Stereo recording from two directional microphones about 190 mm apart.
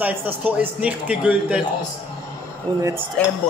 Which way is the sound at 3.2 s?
5° left (ahead or behind).